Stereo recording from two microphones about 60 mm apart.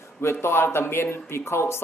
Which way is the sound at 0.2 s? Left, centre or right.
Left.